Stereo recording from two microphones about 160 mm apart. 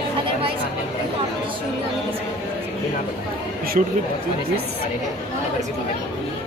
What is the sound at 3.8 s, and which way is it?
Speech, 55° right (ahead or behind).